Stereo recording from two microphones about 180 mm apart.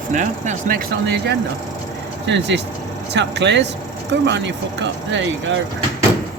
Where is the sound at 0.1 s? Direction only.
45° right (ahead or behind).